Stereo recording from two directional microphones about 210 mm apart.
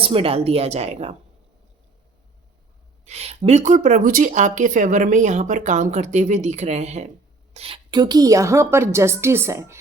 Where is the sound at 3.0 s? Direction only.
30° right (ahead or behind).